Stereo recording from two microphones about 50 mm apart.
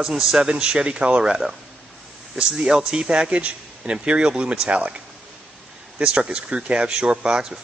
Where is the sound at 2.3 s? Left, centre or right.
Centre.